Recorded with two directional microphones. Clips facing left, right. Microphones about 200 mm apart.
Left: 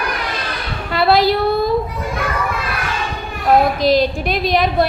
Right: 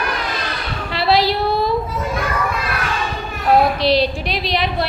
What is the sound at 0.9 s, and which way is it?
Child singing, 50° left (ahead or behind).